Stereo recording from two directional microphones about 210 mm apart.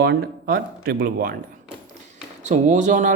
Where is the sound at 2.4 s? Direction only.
35° right (ahead or behind).